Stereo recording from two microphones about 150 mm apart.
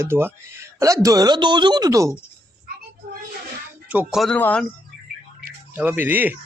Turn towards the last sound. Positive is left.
turn(degrees=-10)  # may be behind; listen again after turning